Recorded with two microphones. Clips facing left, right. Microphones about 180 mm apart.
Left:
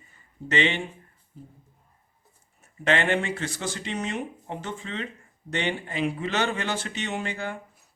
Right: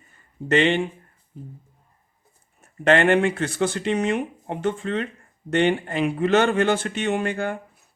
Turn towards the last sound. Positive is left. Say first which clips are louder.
# right 7 dB
turn(degrees=-55)  # may be behind; listen again after turning